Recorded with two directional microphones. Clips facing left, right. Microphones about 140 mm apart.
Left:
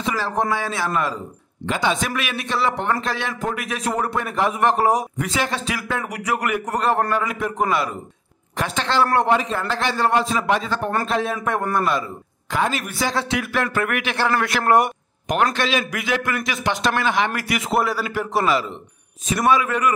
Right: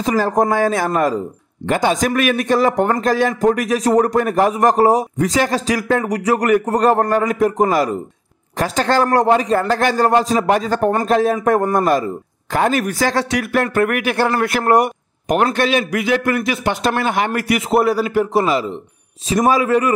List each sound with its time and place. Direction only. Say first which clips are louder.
0.0 s a man's voice: right 7 dB; 40° right (ahead or behind)
15.5 s speech: right 5 dB; 50° right (ahead or behind)
15.8 s a man's voice: right 6 dB; 35° right (ahead or behind)
17.0 s speech: right 2 dB; 50° right (ahead or behind)
17.3 s a man's voice: right 6 dB; 35° right (ahead or behind)
19.2 s a man's voice: right 4 dB; 35° right (ahead or behind)